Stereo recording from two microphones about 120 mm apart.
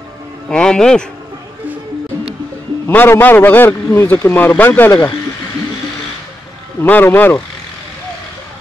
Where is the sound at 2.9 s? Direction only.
15° left (ahead or behind).